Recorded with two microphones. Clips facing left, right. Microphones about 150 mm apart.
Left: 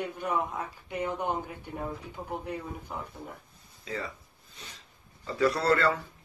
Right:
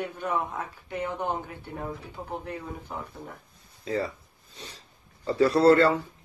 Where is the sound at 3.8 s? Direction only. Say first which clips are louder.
Right 7 dB; 35° right (ahead or behind).